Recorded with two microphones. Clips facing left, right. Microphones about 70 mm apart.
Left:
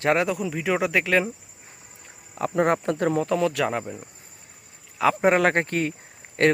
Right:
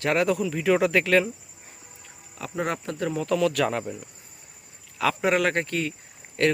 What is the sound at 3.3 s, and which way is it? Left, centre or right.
Speech, left.